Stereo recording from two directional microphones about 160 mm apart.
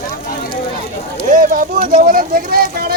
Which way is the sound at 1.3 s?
60° right (ahead or behind).